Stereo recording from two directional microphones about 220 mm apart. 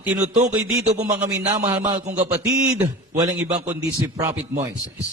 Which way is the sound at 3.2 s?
25° right (ahead or behind).